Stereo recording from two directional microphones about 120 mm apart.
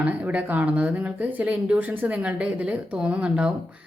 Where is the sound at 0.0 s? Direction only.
10° right (ahead or behind).